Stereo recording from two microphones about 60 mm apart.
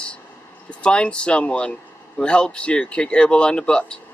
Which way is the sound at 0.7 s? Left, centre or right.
Centre.